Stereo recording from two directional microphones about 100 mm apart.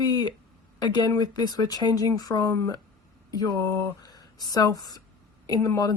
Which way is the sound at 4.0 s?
40° left (ahead or behind).